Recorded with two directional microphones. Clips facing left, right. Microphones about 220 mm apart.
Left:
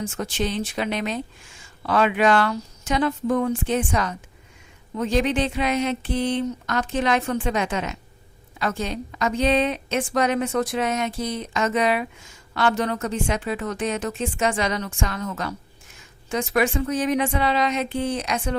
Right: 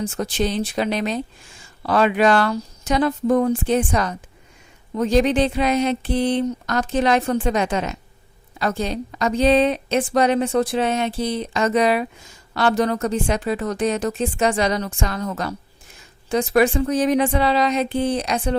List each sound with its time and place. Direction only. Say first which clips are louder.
0.0 s a woman's voice: right 4 dB; 35° right (ahead or behind)